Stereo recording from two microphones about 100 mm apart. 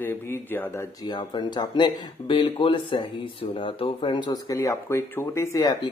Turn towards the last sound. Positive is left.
turn(degrees=35)  # may be behind; listen again after turning